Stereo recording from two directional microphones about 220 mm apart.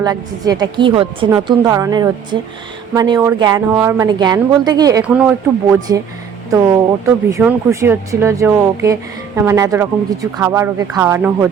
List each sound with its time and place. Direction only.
0.0 s a woman's voice: 15° right (ahead or behind)
7.0 s a woman's voice: 15° right (ahead or behind)